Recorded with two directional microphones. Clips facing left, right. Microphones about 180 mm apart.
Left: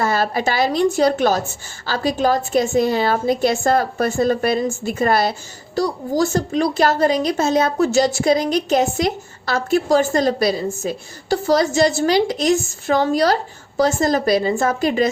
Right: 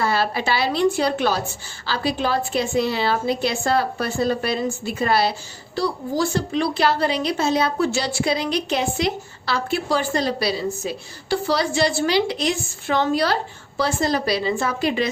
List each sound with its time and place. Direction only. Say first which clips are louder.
0.0 s a woman's voice: left 3 dB; 45° left (ahead or behind)